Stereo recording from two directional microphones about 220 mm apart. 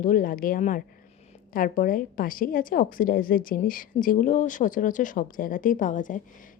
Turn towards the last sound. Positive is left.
turn(degrees=35)  # may be behind; listen again after turning